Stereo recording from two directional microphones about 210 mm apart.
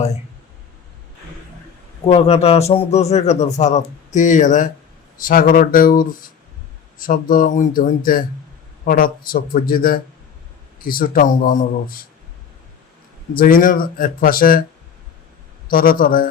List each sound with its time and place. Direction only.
2.0 s speech: 30° left (ahead or behind)
13.3 s speech: 45° left (ahead or behind)
15.7 s speech: 40° left (ahead or behind)